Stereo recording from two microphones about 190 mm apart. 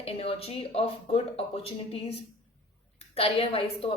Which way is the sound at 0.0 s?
30° left (ahead or behind).